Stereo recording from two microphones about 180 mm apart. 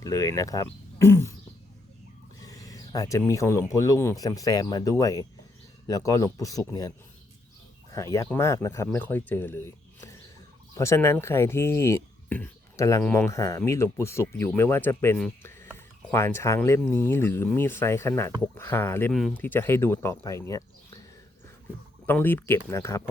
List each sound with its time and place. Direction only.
0.0 s speech: 20° left (ahead or behind)
2.4 s a sound: 20° left (ahead or behind)
3.7 s speech: 15° left (ahead or behind)
22.0 s speech: 10° left (ahead or behind)